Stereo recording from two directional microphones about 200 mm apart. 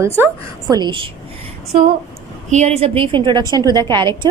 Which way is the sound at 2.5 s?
35° right (ahead or behind).